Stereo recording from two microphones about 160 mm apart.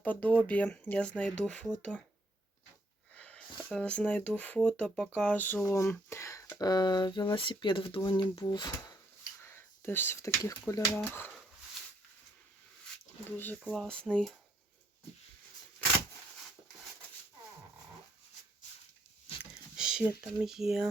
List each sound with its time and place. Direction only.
0.0 s speech: 10° left (ahead or behind)
3.2 s a sound: 5° left (ahead or behind)
3.6 s speech: 5° left (ahead or behind); by 9.0 s 25° left (ahead or behind)
9.4 s speech: 15° left (ahead or behind)
13.3 s speech: 10° left (ahead or behind)
19.7 s speech: 5° right (ahead or behind)